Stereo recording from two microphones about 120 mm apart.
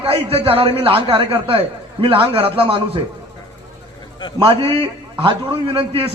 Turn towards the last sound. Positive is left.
turn(degrees=-50)  # may be behind; listen again after turning